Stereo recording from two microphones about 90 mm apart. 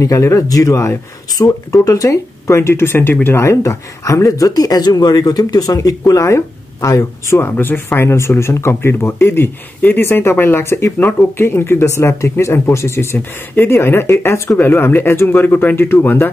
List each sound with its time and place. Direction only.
0.0 s speech: 35° left (ahead or behind)